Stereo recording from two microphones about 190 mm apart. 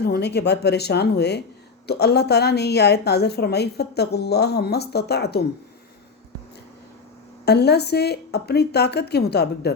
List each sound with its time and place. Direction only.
0.0 s a woman's voice: 60° left (ahead or behind)
7.4 s a woman's voice: 60° left (ahead or behind)